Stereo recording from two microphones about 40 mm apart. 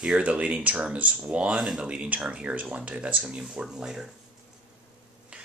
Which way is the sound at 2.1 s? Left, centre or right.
Right.